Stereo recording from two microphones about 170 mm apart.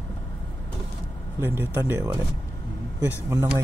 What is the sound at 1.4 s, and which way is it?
Speech, 15° right (ahead or behind).